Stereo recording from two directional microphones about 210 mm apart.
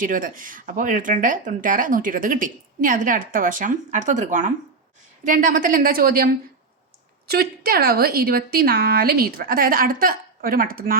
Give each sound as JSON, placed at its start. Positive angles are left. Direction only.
{"t": 0.0, "sound": "a woman's voice", "side_deg": -40}